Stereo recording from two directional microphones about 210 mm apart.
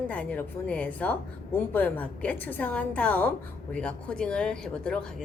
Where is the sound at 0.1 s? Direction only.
5° left (ahead or behind).